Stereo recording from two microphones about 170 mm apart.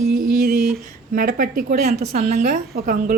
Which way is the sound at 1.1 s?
55° right (ahead or behind).